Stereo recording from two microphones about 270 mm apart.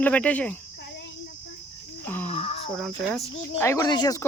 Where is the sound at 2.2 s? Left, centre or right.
Left.